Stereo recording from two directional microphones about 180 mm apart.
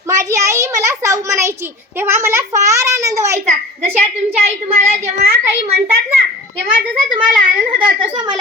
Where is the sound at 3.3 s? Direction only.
40° right (ahead or behind).